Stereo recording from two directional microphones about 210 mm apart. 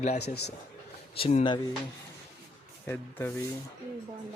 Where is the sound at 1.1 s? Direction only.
25° left (ahead or behind).